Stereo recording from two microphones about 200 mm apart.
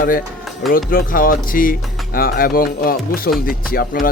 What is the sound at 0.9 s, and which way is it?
Speech, 45° left (ahead or behind).